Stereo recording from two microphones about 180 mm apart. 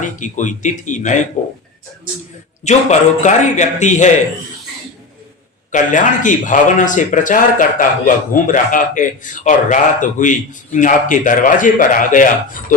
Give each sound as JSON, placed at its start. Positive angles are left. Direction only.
{"t": 0.0, "sound": "a man's voice", "side_deg": 45}
{"t": 2.6, "sound": "a man's voice", "side_deg": 40}
{"t": 5.7, "sound": "a man's voice", "side_deg": 45}